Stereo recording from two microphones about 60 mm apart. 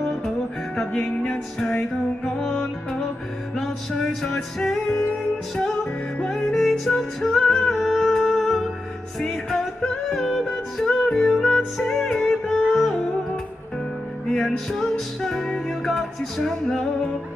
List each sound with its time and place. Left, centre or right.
0.7 s music: centre
6.2 s music: centre
14.3 s music: centre